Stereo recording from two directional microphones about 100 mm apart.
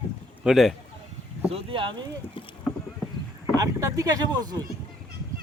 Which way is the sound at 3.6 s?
35° right (ahead or behind).